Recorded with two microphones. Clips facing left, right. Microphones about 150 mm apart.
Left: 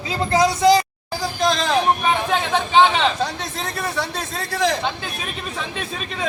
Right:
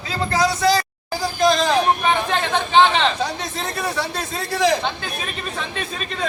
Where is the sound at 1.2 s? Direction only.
Centre (ahead or behind).